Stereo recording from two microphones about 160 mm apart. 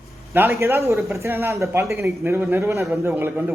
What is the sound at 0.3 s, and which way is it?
A man's voice, 15° right (ahead or behind).